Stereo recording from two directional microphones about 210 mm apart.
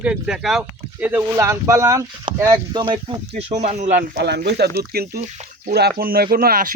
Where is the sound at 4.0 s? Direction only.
50° right (ahead or behind).